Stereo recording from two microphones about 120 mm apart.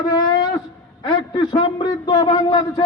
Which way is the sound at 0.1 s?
40° left (ahead or behind).